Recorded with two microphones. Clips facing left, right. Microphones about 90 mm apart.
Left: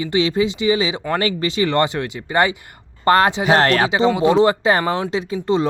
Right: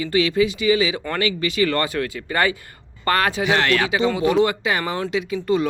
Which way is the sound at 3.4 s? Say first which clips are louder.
Left 4 dB; 40° left (ahead or behind).